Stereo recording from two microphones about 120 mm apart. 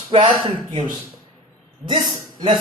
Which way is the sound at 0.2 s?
40° right (ahead or behind).